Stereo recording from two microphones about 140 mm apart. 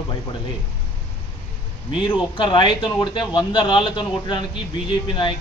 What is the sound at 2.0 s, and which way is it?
A man's voice, 35° left (ahead or behind).